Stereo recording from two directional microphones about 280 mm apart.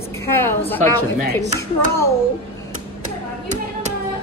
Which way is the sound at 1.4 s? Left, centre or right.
Centre.